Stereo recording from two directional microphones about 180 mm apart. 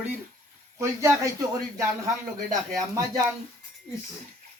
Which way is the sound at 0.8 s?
15° right (ahead or behind).